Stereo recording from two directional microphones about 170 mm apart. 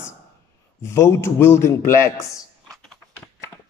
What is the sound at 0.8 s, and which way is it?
A man's voice, 15° left (ahead or behind).